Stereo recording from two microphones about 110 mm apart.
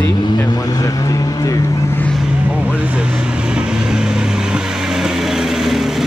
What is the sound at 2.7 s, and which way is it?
Vehicle, 10° right (ahead or behind).